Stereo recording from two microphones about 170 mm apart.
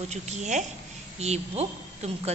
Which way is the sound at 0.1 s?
40° right (ahead or behind).